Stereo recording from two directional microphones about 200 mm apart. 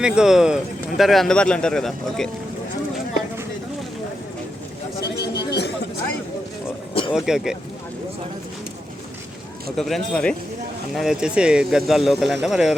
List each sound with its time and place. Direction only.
0.0 s speech: 5° right (ahead or behind)
5.1 s chatter: 55° left (ahead or behind)
7.1 s speech: 5° right (ahead or behind)
9.7 s speech: centre (ahead or behind)